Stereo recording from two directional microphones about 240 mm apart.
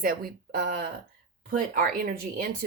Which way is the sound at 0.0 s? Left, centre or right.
Right.